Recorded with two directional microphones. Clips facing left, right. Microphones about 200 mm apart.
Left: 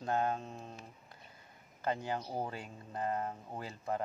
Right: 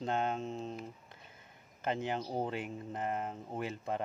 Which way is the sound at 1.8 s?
20° right (ahead or behind).